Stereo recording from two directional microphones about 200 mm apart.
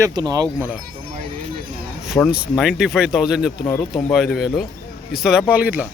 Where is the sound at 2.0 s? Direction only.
5° right (ahead or behind).